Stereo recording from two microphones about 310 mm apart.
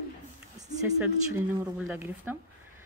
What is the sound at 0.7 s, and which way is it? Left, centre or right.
A woman's voice, centre.